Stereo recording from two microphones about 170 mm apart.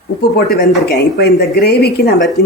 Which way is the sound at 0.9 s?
75° left (ahead or behind).